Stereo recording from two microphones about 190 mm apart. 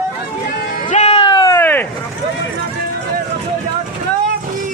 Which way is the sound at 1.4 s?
10° left (ahead or behind).